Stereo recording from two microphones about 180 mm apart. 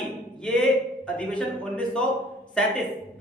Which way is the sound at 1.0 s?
5° left (ahead or behind).